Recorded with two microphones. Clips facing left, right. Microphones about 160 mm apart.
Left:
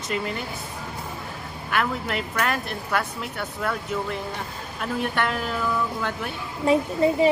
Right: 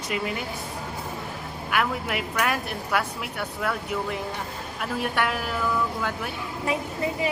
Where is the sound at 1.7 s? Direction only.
10° right (ahead or behind).